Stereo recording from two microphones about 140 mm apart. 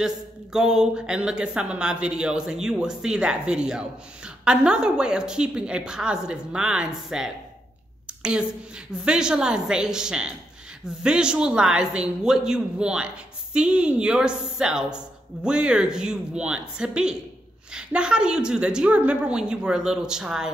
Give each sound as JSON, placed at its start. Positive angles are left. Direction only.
{"t": 0.0, "sound": "a woman's voice", "side_deg": -5}
{"t": 8.1, "sound": "a sound", "side_deg": -5}
{"t": 9.0, "sound": "a woman's voice", "side_deg": -5}